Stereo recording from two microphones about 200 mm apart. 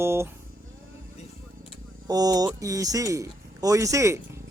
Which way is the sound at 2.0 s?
20° right (ahead or behind).